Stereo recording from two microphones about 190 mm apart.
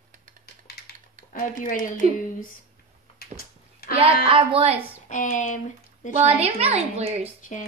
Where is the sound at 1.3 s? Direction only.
45° left (ahead or behind).